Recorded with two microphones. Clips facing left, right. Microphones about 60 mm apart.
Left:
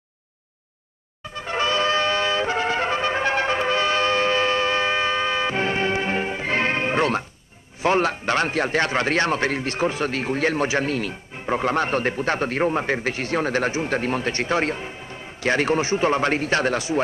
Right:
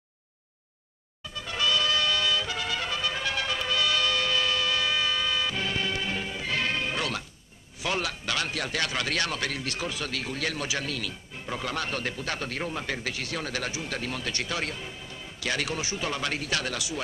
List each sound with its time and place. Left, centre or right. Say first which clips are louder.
1.3 s music: left 5 dB; left
7.8 s a man's voice: left 10 dB; left